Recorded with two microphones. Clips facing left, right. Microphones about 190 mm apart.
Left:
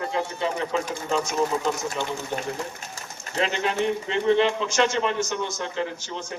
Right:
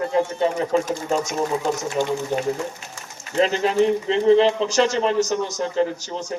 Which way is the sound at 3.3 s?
35° right (ahead or behind).